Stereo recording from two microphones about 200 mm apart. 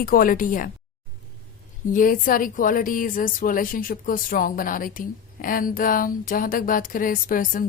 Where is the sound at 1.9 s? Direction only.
45° left (ahead or behind).